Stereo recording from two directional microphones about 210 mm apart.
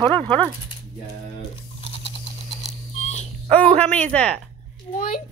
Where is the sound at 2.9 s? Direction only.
30° left (ahead or behind).